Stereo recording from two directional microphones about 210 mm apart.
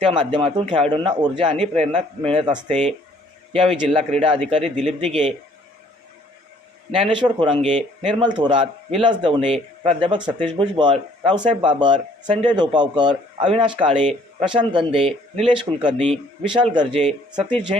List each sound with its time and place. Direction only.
0.0 s speech: 20° right (ahead or behind)
6.9 s speech: 25° right (ahead or behind)
17.1 s speech: centre (ahead or behind)